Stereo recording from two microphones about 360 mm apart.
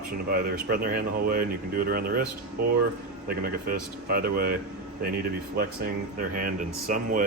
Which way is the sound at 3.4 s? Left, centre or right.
Right.